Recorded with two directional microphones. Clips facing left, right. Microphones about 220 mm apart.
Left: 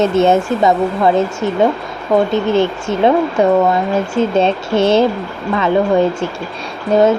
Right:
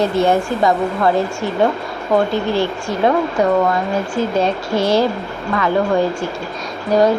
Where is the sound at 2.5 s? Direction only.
20° left (ahead or behind).